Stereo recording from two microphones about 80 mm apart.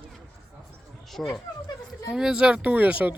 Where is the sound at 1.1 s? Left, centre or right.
Centre.